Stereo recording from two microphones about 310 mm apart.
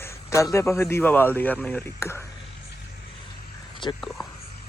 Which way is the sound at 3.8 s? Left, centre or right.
Centre.